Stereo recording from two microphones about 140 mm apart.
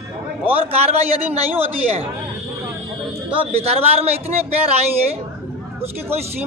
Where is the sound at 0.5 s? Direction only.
45° right (ahead or behind).